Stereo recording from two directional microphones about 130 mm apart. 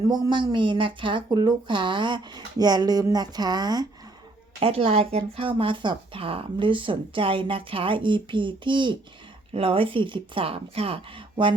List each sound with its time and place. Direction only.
0.1 s speech: 35° right (ahead or behind)
4.6 s speech: 50° right (ahead or behind)